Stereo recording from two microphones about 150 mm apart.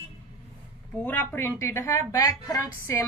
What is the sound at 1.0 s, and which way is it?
A woman's voice, 10° left (ahead or behind).